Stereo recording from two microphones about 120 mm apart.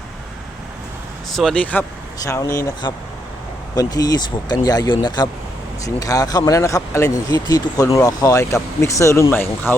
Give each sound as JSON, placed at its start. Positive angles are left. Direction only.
{"t": 1.3, "sound": "speech", "side_deg": 5}
{"t": 2.2, "sound": "speech", "side_deg": 30}